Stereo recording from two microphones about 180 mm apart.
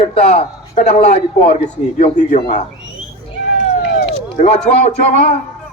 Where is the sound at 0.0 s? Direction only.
35° left (ahead or behind).